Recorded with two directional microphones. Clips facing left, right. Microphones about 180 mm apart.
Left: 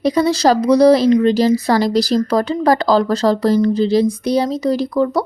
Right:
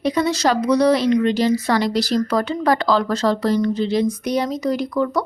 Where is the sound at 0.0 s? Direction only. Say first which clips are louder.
Left 5 dB; 35° left (ahead or behind).